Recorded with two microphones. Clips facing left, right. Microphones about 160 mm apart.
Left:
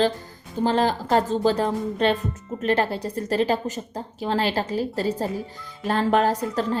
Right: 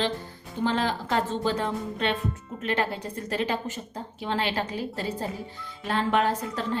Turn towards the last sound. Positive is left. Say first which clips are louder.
# left 5 dB
turn(degrees=40)  # may be behind; listen again after turning